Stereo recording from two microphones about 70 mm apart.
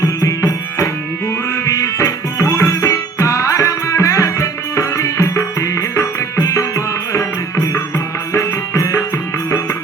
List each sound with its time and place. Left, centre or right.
0.0 s music: left